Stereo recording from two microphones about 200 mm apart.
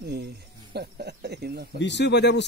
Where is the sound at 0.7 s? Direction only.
50° right (ahead or behind).